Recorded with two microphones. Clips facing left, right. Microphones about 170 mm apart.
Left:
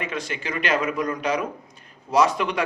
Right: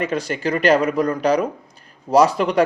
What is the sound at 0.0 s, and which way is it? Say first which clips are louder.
Speech: right 8 dB; 40° right (ahead or behind).